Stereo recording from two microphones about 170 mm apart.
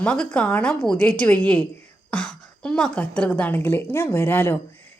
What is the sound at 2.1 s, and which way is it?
A woman's voice, 5° left (ahead or behind).